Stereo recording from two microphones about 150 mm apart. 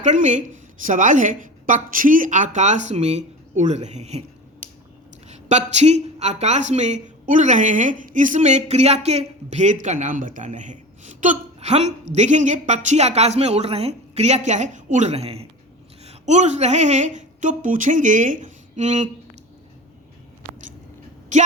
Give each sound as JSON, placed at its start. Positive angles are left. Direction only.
{"t": 0.0, "sound": "speech", "side_deg": -55}
{"t": 5.3, "sound": "a woman's voice", "side_deg": -50}
{"t": 21.3, "sound": "speech", "side_deg": -55}